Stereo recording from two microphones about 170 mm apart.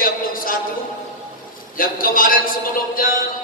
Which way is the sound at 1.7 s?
55° left (ahead or behind).